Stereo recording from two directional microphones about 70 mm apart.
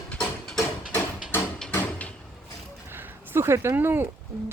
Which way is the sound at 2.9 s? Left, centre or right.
Right.